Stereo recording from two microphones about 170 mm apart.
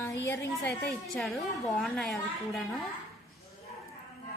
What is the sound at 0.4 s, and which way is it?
A woman's voice, 5° left (ahead or behind).